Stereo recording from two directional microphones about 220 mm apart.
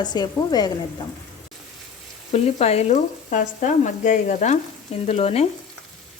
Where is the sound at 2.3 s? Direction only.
30° left (ahead or behind).